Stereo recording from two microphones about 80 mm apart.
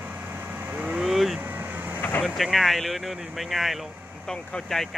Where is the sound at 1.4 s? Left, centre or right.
Right.